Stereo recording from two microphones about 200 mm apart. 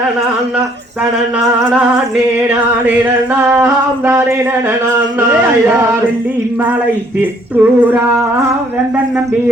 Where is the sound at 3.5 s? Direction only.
10° right (ahead or behind).